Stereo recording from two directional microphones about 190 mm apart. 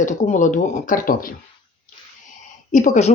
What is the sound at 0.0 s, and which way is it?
Speech, 40° left (ahead or behind).